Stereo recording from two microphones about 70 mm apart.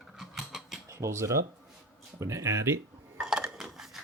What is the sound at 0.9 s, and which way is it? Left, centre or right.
Speech, right.